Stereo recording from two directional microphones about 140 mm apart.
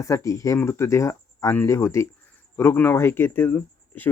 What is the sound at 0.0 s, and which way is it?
Speech, 25° left (ahead or behind).